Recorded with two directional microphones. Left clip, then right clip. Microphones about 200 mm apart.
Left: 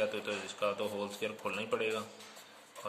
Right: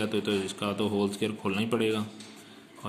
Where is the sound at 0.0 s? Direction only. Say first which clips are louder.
Right 6 dB; 25° right (ahead or behind).